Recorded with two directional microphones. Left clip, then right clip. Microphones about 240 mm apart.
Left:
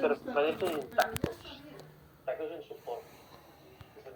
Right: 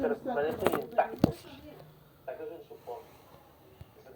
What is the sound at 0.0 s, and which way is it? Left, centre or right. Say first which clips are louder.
Bird: left 1 dB; left.